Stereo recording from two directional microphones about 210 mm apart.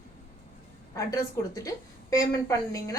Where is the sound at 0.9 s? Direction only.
15° left (ahead or behind).